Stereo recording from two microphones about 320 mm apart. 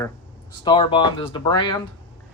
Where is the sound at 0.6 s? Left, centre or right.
Centre.